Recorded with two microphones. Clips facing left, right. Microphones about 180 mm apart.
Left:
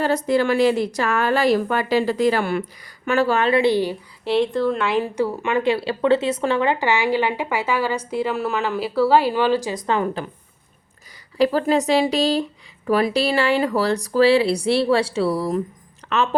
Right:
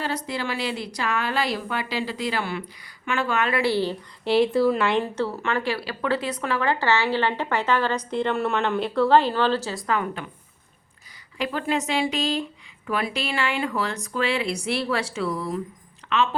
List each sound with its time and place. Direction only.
0.0 s a woman's voice: 50° left (ahead or behind)
3.1 s speech: 35° left (ahead or behind); by 3.9 s 15° left (ahead or behind)
4.2 s a woman's voice: centre (ahead or behind); by 9.8 s 15° left (ahead or behind)
9.8 s speech: 30° left (ahead or behind)
11.3 s speech: 35° left (ahead or behind)